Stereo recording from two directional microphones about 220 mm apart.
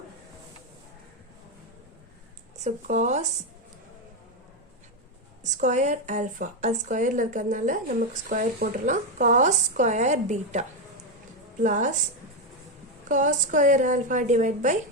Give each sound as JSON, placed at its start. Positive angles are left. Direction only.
{"t": 2.6, "sound": "speech", "side_deg": -35}
{"t": 5.4, "sound": "speech", "side_deg": -35}
{"t": 13.1, "sound": "speech", "side_deg": -35}